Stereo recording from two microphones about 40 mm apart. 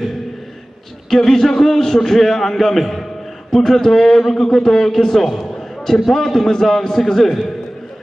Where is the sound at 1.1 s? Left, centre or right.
Centre.